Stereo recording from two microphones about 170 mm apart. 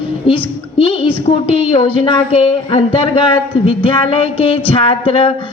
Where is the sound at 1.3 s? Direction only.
25° left (ahead or behind).